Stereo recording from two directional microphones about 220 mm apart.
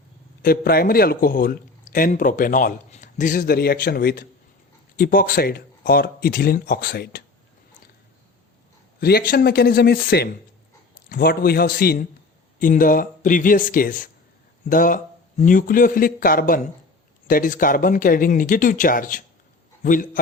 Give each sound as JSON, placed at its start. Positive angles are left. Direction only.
{"t": 0.4, "sound": "a man's voice", "side_deg": 45}
{"t": 9.0, "sound": "a man's voice", "side_deg": 45}